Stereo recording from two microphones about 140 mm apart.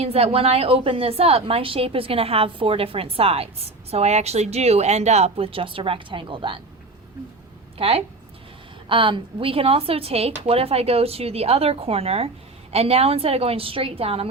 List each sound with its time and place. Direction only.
0.0 s a woman's voice: 45° right (ahead or behind)
7.8 s a woman's voice: 45° right (ahead or behind)